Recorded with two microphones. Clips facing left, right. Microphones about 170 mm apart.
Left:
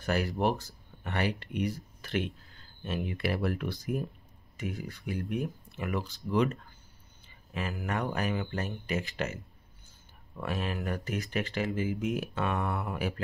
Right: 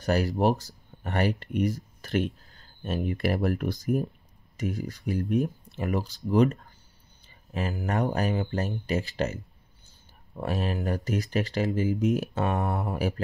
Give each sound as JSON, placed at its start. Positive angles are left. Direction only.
{"t": 0.0, "sound": "speech", "side_deg": -40}